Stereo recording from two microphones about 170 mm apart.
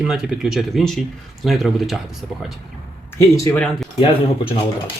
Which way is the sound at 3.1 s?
20° left (ahead or behind).